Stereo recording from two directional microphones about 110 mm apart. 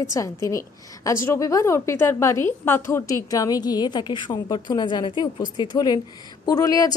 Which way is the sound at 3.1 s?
30° left (ahead or behind).